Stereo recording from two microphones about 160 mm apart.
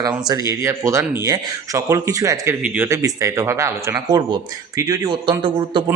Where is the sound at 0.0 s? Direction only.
20° right (ahead or behind).